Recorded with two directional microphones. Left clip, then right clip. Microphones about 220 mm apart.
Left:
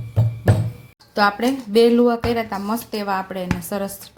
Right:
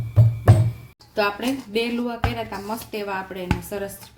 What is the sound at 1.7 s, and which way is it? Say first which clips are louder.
A woman's voice: left 14 dB; 35° left (ahead or behind).